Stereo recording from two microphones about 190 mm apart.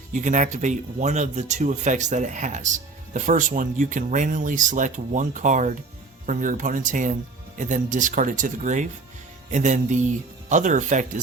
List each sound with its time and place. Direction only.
0.1 s speech: 40° right (ahead or behind)